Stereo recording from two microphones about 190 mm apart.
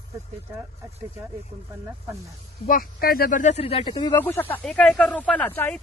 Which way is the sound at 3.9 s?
20° left (ahead or behind).